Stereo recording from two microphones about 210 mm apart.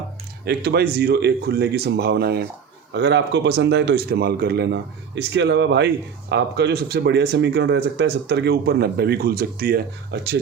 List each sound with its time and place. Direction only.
0.4 s speech: 50° right (ahead or behind)